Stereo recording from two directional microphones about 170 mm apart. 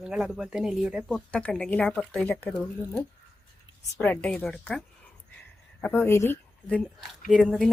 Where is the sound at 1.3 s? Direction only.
5° left (ahead or behind).